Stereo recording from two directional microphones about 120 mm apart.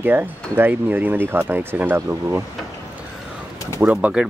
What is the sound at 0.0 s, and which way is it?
Speech, 15° right (ahead or behind).